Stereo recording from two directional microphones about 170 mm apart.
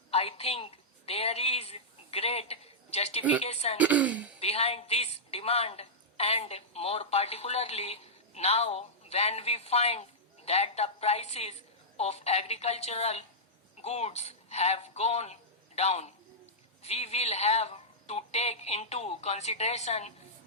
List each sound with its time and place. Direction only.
0.1 s a woman's voice: 35° left (ahead or behind)
3.8 s speech: 10° right (ahead or behind)
4.4 s a woman's voice: 35° left (ahead or behind)